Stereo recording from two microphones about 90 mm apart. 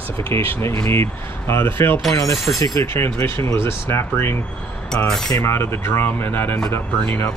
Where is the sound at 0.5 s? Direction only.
30° left (ahead or behind).